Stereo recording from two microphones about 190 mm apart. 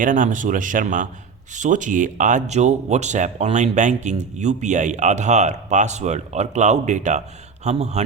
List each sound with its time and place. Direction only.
0.0 s speech: 45° right (ahead or behind)